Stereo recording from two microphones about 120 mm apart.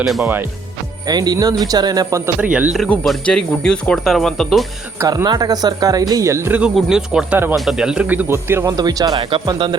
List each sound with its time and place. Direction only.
0.0 s speech: 5° right (ahead or behind)
1.0 s speech: 35° right (ahead or behind)
2.4 s speech: 10° right (ahead or behind)
2.7 s speech: 5° left (ahead or behind)
4.9 s speech: 30° right (ahead or behind)
6.7 s speech: 5° right (ahead or behind); by 8.7 s 20° right (ahead or behind)
8.7 s speech: 35° right (ahead or behind)